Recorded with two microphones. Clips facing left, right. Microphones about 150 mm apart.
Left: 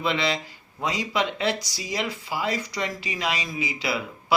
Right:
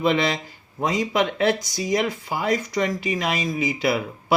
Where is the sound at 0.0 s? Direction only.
45° right (ahead or behind).